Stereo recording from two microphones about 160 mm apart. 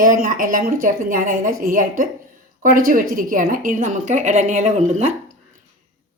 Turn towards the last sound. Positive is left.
turn(degrees=-45)  # may be behind; listen again after turning